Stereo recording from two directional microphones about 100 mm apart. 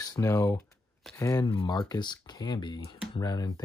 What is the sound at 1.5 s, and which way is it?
Speech, 50° left (ahead or behind).